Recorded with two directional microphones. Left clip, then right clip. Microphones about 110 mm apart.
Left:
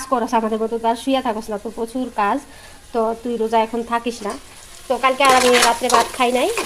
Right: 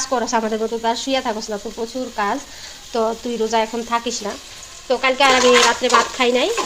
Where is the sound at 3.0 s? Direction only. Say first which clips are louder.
Right 1 dB; centre (ahead or behind).